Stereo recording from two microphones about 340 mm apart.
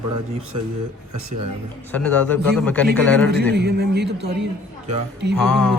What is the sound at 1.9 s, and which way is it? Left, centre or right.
A man's voice, centre.